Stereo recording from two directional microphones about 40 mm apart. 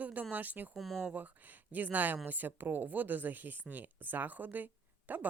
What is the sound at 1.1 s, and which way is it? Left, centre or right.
Speech, right.